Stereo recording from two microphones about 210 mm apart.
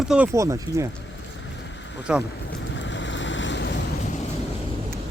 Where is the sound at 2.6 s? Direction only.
60° left (ahead or behind).